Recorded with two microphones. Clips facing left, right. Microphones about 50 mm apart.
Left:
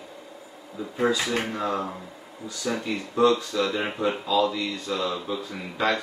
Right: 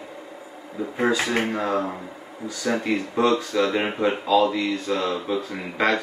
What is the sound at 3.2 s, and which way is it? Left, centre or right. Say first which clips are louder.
Speech: even; right.